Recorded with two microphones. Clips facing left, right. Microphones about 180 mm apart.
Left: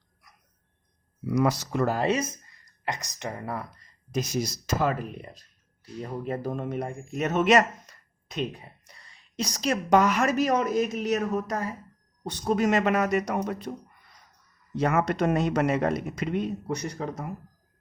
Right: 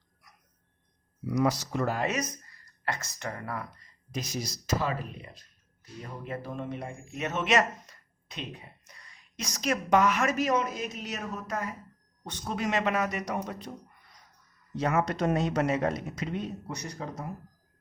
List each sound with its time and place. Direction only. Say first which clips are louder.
1.4 s speech: left 3 dB; 55° left (ahead or behind)
1.9 s speech: left 5 dB; 30° left (ahead or behind)
4.1 s a man's voice: left 7 dB; 50° left (ahead or behind)
8.9 s a woman's voice: left 1 dB; 30° left (ahead or behind); by 13.7 s 55° left (ahead or behind)
14.8 s speech: left 3 dB; 60° left (ahead or behind)